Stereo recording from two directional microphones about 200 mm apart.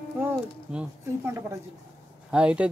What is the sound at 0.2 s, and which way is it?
Speech, 10° right (ahead or behind).